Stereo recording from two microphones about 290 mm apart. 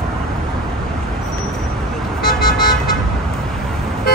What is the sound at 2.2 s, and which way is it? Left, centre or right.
Vehicle, left.